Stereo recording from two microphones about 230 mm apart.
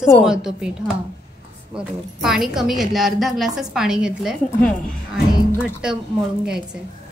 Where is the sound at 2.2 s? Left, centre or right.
Centre.